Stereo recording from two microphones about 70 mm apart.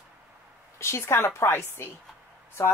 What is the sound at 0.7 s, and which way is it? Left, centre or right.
Speech, left.